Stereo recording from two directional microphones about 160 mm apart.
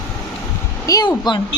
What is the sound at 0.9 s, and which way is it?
Speech, 25° left (ahead or behind).